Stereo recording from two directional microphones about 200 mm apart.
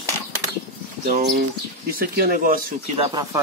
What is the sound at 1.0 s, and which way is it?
Speech, 45° right (ahead or behind).